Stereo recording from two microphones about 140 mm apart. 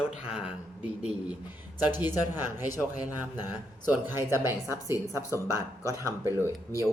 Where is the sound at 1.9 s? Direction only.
15° right (ahead or behind).